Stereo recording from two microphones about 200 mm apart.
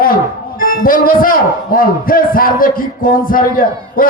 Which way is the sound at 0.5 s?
45° left (ahead or behind).